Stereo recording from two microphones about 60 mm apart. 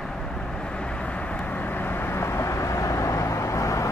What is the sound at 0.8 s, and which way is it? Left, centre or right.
Vehicle, centre.